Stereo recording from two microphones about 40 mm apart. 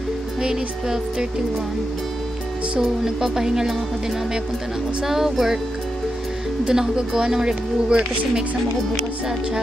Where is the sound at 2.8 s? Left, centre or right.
Centre.